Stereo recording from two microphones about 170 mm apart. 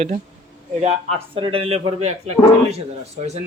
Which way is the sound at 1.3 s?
30° right (ahead or behind).